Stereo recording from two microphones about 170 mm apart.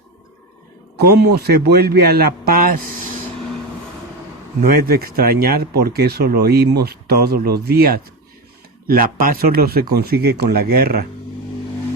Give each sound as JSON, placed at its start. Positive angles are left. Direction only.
{"t": 0.9, "sound": "a man's voice", "side_deg": -70}
{"t": 4.9, "sound": "speech", "side_deg": -60}